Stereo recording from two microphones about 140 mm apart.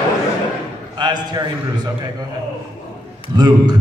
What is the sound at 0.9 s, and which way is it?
Speech, 30° right (ahead or behind).